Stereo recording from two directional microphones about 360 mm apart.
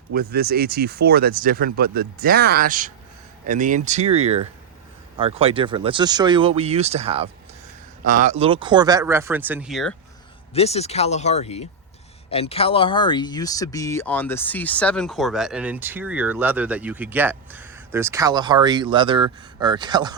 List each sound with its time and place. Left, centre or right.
0.1 s speech: right; by 9.9 s centre
10.5 s speech: centre